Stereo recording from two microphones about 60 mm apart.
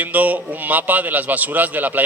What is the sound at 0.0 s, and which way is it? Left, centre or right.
A man's voice, right.